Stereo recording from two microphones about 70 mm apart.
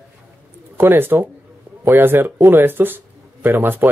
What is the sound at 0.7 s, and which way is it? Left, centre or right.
A woman's voice, right.